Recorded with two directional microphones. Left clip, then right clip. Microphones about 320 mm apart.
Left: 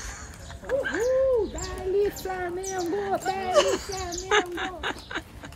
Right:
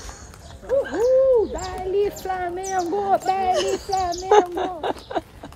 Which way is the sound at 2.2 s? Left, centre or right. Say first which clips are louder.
Right 5 dB; centre.